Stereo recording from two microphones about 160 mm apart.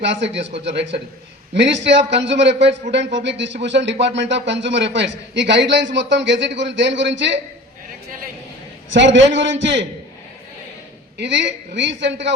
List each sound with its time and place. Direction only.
0.0 s a man's voice: 90° right
9.0 s a man's voice: 90° right
11.2 s a man's voice: 90° right